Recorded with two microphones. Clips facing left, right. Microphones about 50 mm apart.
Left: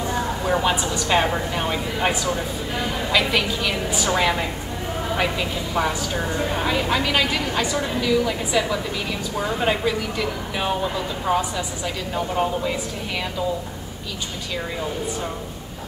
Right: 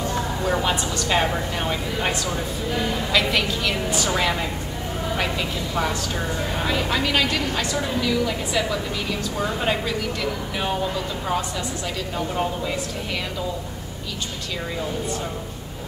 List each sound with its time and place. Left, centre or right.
0.0 s a woman's voice: centre